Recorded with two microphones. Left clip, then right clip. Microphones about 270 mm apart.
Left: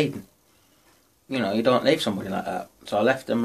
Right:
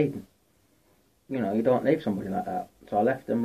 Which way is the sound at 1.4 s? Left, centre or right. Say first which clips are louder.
Left 3 dB; left.